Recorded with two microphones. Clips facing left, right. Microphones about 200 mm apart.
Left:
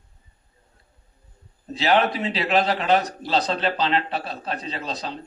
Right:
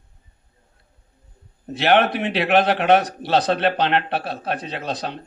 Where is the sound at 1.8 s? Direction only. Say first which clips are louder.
Right 3 dB; 75° right (ahead or behind).